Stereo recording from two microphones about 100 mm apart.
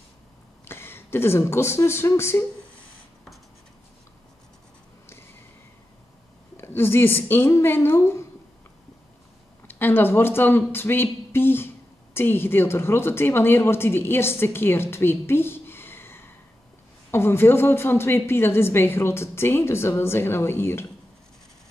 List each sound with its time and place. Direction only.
0.7 s speech: 25° left (ahead or behind)
6.5 s a woman's voice: 25° left (ahead or behind)
9.7 s a woman's voice: 20° left (ahead or behind)